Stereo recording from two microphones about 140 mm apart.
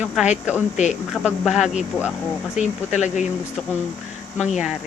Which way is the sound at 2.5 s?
55° left (ahead or behind).